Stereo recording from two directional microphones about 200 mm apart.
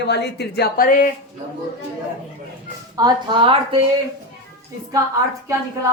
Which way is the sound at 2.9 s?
20° right (ahead or behind).